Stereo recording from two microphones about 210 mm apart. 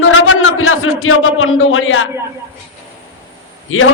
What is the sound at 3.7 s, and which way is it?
Speech, 75° left (ahead or behind).